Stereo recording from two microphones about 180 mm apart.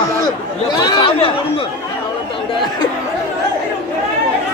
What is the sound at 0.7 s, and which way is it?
Speech, 25° left (ahead or behind).